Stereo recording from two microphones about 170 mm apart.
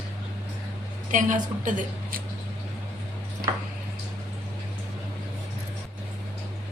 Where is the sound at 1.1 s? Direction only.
50° right (ahead or behind).